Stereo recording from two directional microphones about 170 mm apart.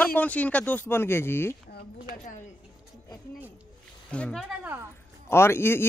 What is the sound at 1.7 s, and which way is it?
Speech, 60° left (ahead or behind).